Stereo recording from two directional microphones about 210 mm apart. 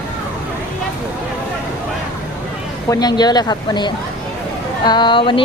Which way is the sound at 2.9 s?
20° left (ahead or behind).